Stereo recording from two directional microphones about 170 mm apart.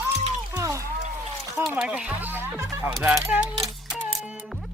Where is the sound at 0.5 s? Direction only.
15° right (ahead or behind).